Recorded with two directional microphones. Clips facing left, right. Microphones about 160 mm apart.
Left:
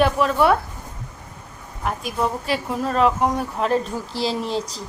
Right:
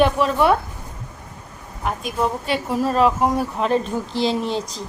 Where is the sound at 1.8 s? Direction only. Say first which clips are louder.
Right 1 dB; centre (ahead or behind).